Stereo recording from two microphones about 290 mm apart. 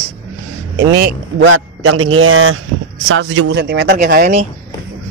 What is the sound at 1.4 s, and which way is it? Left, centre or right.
A man's voice, right.